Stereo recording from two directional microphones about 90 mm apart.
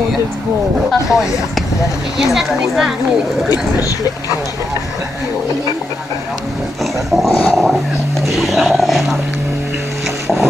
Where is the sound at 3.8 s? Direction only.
40° left (ahead or behind).